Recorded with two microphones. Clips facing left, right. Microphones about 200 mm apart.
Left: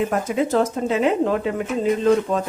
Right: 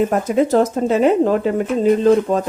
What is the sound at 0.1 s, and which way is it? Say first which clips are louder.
Speech: right 5 dB; 40° right (ahead or behind).